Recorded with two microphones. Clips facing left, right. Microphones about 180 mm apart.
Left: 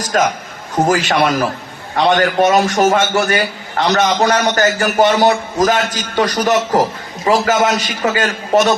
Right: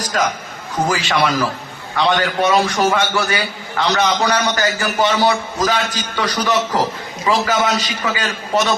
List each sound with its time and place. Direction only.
0.1 s a man's voice: 50° left (ahead or behind)